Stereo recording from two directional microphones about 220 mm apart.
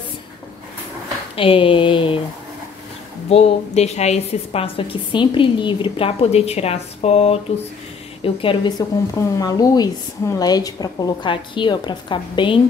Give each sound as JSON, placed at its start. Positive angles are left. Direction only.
{"t": 1.3, "sound": "a woman's voice", "side_deg": 25}
{"t": 3.3, "sound": "a woman's voice", "side_deg": 25}